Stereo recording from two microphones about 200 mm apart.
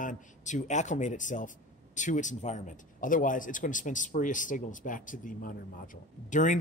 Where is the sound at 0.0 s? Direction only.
40° left (ahead or behind).